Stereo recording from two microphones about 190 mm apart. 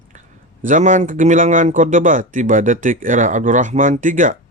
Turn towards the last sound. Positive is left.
turn(degrees=-45)  # may be behind; listen again after turning